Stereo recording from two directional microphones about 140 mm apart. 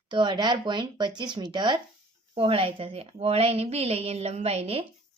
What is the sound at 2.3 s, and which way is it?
A woman's voice, 40° right (ahead or behind).